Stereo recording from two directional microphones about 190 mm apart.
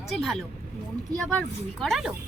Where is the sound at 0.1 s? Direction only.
Centre (ahead or behind).